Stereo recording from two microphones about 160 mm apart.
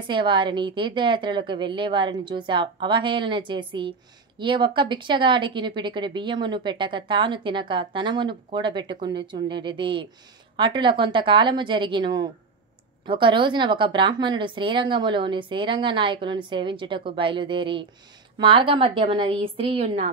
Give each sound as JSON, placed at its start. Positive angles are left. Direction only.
{"t": 0.0, "sound": "a woman's voice", "side_deg": -30}